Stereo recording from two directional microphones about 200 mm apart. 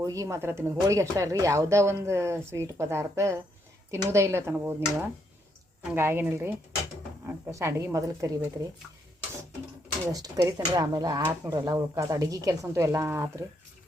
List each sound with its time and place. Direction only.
0.0 s speech: 15° right (ahead or behind)
10.1 s speech: 20° right (ahead or behind)